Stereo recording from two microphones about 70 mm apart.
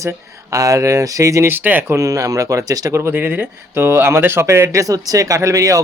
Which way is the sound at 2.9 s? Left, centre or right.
Right.